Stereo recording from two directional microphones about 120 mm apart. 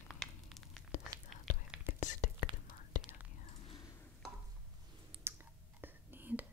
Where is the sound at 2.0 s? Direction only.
90° left.